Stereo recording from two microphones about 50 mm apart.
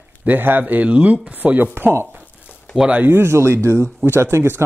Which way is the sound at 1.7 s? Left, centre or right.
Right.